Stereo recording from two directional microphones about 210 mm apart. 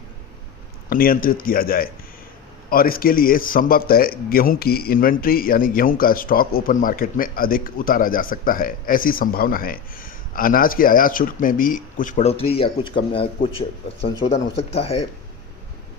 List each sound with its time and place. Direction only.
0.9 s a man's voice: 45° left (ahead or behind)